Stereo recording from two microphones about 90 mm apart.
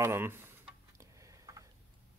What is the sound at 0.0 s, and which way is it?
Speech, 30° right (ahead or behind).